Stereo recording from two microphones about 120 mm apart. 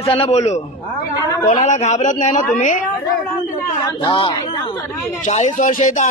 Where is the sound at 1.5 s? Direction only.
65° left (ahead or behind); by 2.8 s 90° left.